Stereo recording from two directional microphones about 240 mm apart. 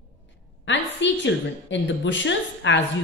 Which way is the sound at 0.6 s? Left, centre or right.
Left.